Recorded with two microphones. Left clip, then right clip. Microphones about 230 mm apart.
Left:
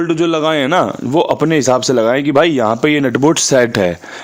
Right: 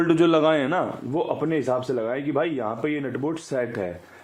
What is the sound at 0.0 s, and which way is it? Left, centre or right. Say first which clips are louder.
Speech: left 4 dB; centre.